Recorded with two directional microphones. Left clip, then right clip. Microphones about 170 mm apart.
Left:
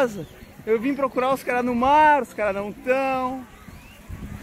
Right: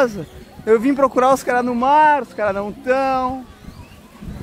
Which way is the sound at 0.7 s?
20° right (ahead or behind).